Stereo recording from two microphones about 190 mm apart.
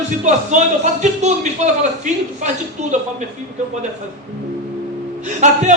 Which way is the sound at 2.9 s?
40° right (ahead or behind).